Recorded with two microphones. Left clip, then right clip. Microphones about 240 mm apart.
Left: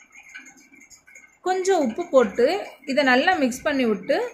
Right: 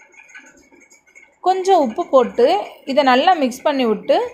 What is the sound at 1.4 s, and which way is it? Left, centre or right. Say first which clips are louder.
A woman's voice: right 7 dB; centre.